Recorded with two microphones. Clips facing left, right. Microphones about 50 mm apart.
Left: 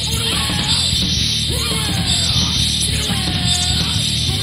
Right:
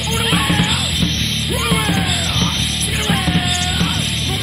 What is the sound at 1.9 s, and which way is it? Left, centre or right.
Music, right.